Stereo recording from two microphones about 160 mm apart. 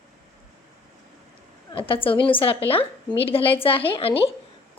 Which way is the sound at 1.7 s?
35° left (ahead or behind).